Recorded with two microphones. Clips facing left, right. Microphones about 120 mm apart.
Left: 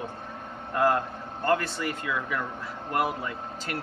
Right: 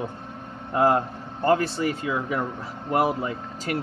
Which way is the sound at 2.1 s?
30° right (ahead or behind).